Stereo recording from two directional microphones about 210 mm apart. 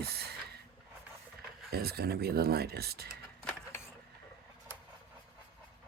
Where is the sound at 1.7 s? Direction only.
50° right (ahead or behind).